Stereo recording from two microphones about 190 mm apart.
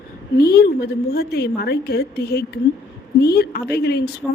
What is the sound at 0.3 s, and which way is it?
A man's voice, 55° left (ahead or behind).